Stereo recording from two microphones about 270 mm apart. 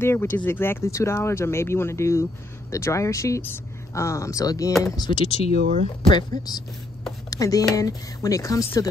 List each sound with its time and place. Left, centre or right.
0.0 s speech: centre
5.6 s speech: right
6.0 s speech: centre